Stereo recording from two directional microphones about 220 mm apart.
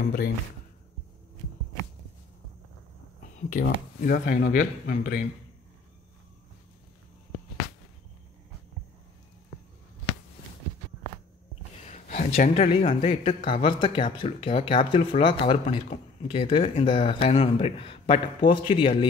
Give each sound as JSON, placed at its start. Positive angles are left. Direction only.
{"t": 3.3, "sound": "speech", "side_deg": 40}
{"t": 11.8, "sound": "speech", "side_deg": 30}